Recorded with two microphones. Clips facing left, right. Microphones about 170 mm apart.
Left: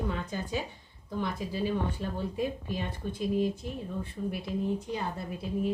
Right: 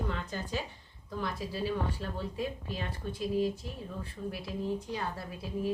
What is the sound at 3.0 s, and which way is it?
A woman's voice, 5° left (ahead or behind).